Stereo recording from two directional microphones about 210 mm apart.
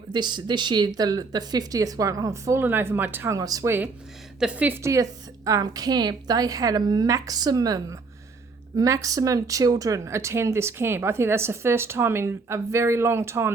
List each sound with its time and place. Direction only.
0.1 s speech: 20° right (ahead or behind)